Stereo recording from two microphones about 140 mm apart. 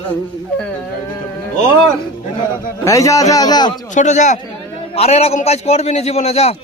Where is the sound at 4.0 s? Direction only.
60° left (ahead or behind).